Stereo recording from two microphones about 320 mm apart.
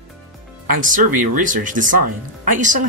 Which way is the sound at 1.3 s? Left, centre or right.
Right.